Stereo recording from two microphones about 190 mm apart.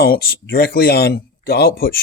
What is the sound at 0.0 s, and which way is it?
Speech, 55° left (ahead or behind).